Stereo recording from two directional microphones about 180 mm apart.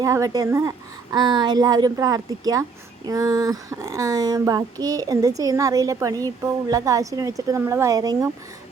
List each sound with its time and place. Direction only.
0.0 s speech: 20° right (ahead or behind)
1.1 s child singing: 25° right (ahead or behind)